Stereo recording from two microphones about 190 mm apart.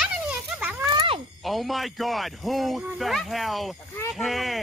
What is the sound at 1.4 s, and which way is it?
Speech, centre (ahead or behind).